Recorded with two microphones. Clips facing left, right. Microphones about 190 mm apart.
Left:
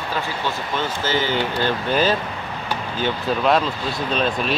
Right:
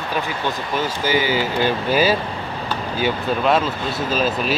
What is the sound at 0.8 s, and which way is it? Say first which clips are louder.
Speech: right 3 dB; 10° right (ahead or behind).